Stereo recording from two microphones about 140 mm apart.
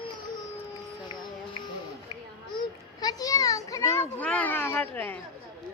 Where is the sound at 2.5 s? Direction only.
25° left (ahead or behind).